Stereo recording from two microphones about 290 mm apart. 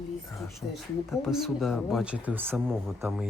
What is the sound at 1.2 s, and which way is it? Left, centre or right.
Speech, centre.